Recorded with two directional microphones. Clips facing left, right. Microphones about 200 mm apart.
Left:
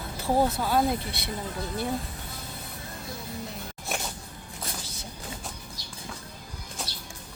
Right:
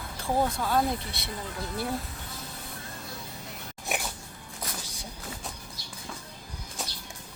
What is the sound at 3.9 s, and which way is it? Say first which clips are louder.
Music: right 1 dB; 15° right (ahead or behind).